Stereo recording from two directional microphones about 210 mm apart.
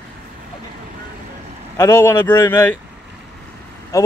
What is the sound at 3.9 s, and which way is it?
Speech, 15° left (ahead or behind).